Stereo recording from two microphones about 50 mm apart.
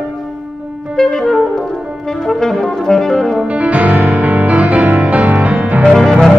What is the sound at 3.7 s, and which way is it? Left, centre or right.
Music, right.